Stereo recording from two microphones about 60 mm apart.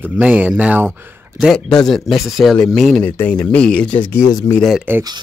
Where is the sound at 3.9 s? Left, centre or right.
Left.